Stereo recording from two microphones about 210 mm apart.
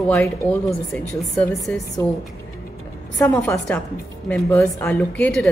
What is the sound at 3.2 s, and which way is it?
A woman's voice, 10° left (ahead or behind).